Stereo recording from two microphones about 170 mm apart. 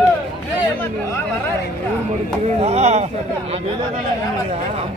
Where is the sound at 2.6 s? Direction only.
40° right (ahead or behind).